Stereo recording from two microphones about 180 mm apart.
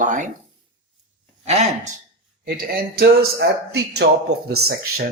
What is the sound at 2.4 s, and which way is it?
Speech, 60° right (ahead or behind).